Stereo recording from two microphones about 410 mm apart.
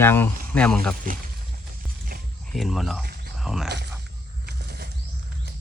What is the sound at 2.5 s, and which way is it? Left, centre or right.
Speech, centre.